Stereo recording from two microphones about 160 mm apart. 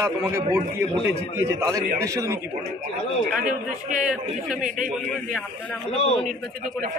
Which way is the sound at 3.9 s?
5° right (ahead or behind).